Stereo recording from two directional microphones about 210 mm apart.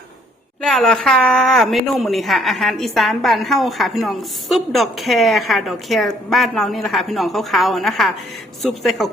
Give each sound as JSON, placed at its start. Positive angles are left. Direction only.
{"t": 0.6, "sound": "speech", "side_deg": 5}